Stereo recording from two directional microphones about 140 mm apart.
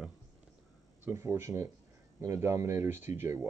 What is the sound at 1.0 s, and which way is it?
Speech, 20° right (ahead or behind).